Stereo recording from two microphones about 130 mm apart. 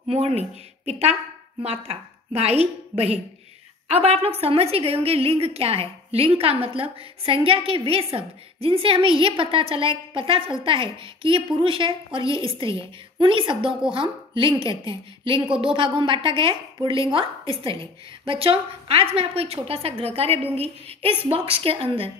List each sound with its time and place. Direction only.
0.1 s a woman's voice: 50° right (ahead or behind)